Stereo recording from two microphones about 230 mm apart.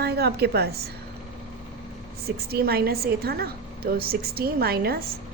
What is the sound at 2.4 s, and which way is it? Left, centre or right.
A woman's voice, right.